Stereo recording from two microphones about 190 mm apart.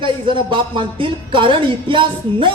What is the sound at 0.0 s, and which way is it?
Speech, 25° right (ahead or behind).